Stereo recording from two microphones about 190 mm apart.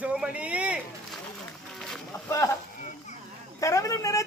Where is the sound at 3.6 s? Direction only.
15° left (ahead or behind).